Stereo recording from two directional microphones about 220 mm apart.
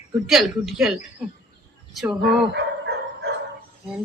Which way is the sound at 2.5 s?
50° right (ahead or behind).